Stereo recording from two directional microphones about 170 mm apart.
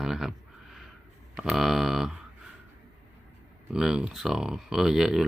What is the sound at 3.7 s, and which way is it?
Speech, 5° right (ahead or behind).